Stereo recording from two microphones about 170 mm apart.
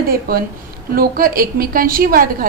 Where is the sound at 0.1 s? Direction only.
60° right (ahead or behind).